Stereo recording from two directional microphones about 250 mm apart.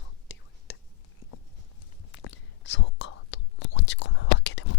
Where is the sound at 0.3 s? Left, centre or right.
Left.